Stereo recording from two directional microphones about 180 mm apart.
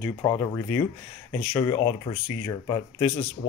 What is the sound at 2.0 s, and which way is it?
Speech, 25° left (ahead or behind).